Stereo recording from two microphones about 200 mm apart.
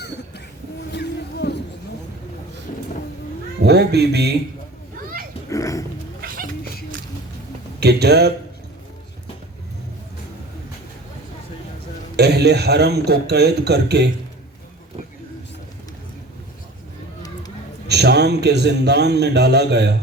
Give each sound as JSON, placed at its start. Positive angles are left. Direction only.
{"t": 0.9, "sound": "a sound", "side_deg": 55}
{"t": 3.6, "sound": "speech", "side_deg": -55}
{"t": 5.5, "sound": "dog", "side_deg": 15}
{"t": 6.2, "sound": "cat", "side_deg": -45}
{"t": 7.8, "sound": "a man's voice", "side_deg": -55}
{"t": 12.1, "sound": "a man's voice", "side_deg": -55}
{"t": 17.8, "sound": "a man's voice", "side_deg": -55}